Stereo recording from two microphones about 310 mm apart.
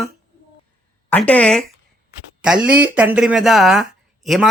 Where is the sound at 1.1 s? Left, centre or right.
Centre.